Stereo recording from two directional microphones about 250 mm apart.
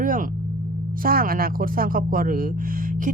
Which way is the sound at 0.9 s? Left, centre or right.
Right.